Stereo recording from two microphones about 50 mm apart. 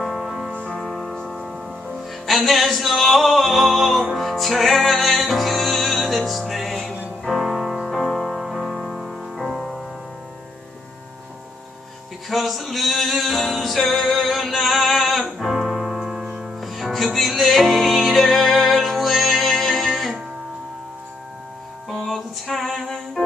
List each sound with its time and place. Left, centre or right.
0.0 s music: centre
0.7 s music: centre
7.4 s music: centre
7.8 s music: centre
8.9 s music: centre
12.3 s music: centre
16.6 s music: centre
21.8 s music: centre